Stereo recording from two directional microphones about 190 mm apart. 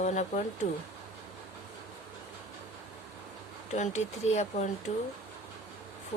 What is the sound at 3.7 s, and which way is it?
Speech, 35° left (ahead or behind).